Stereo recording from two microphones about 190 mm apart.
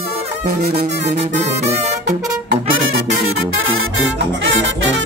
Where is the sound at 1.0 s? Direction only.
35° right (ahead or behind).